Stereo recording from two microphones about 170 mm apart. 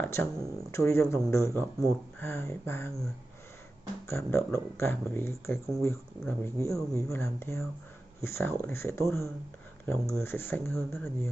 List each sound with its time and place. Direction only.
0.0 s speech: 15° left (ahead or behind)
4.1 s speech: 15° left (ahead or behind)